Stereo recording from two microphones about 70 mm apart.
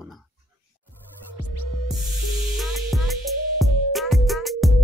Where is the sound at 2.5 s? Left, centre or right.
Centre.